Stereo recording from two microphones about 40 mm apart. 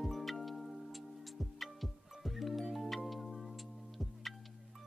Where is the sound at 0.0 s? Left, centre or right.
Centre.